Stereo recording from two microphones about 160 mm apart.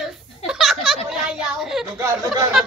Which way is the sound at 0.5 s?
Centre (ahead or behind).